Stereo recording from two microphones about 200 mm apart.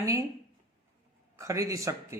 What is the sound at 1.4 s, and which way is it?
Speech, 15° right (ahead or behind).